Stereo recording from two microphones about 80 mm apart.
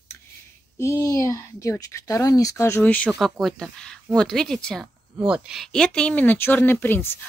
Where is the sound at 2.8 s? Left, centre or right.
Centre.